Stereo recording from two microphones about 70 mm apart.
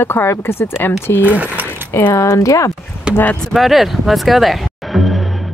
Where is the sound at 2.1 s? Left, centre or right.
Left.